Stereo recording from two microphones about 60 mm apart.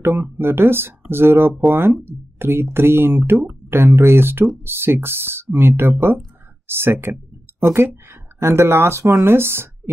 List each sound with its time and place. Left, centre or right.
0.0 s speech: right